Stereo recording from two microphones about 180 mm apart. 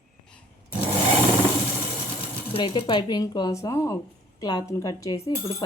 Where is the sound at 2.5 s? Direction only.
25° left (ahead or behind).